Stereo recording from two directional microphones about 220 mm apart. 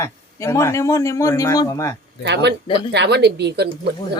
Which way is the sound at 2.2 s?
50° right (ahead or behind).